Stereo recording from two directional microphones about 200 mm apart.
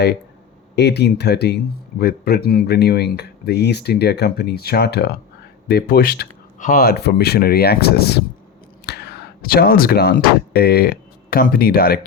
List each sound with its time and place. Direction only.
0.8 s speech: 55° left (ahead or behind)